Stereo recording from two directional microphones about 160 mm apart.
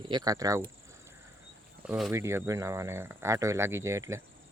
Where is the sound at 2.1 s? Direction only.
15° right (ahead or behind).